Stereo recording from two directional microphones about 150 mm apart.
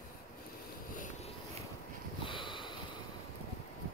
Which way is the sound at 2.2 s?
35° left (ahead or behind).